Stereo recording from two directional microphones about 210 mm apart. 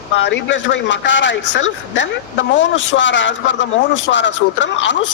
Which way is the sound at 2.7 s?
60° left (ahead or behind).